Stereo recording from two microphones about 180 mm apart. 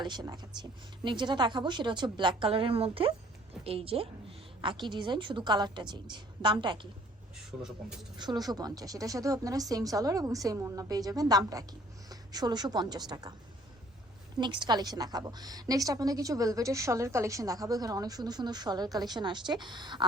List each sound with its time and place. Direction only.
0.0 s a woman's voice: 20° right (ahead or behind)
3.6 s a sound: 30° right (ahead or behind)
4.8 s a woman's voice: 25° right (ahead or behind)
7.3 s a man's voice: 5° right (ahead or behind)
8.1 s a woman's voice: 25° right (ahead or behind)
14.3 s a woman's voice: 25° right (ahead or behind)